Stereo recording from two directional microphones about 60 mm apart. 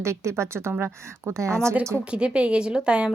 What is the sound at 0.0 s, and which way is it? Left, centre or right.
Speech, right.